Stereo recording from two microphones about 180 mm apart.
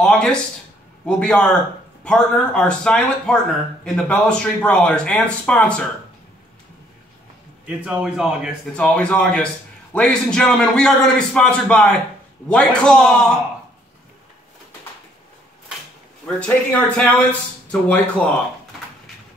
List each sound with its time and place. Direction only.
0.0 s a man's voice: 5° left (ahead or behind)
7.6 s a man's voice: 5° right (ahead or behind)
16.3 s speech: 5° left (ahead or behind)